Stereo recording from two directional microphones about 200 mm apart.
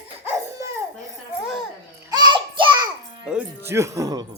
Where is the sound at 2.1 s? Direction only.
20° right (ahead or behind).